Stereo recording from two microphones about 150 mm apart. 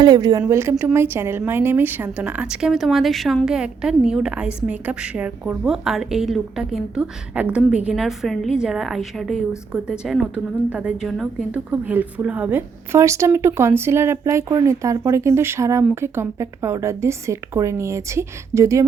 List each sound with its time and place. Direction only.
0.0 s a woman's voice: 25° right (ahead or behind)